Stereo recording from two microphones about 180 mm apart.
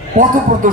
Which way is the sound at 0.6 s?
45° right (ahead or behind).